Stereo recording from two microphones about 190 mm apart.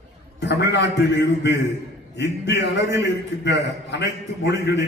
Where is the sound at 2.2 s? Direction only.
65° left (ahead or behind).